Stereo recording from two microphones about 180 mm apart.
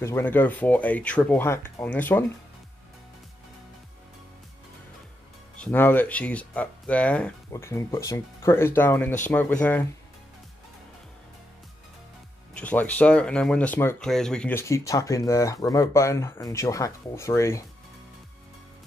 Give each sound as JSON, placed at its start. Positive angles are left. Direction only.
{"t": 0.0, "sound": "speech", "side_deg": 15}
{"t": 5.6, "sound": "speech", "side_deg": 10}
{"t": 7.5, "sound": "speech", "side_deg": 15}
{"t": 12.5, "sound": "speech", "side_deg": 10}